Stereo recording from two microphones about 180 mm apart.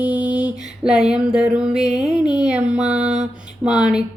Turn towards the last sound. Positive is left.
turn(degrees=-5)  # may be behind; listen again after turning